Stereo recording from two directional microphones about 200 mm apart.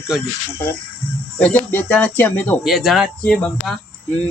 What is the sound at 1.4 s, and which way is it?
Speech, 10° left (ahead or behind).